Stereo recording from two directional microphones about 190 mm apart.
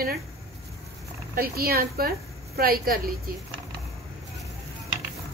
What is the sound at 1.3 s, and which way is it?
A woman's voice, 55° right (ahead or behind).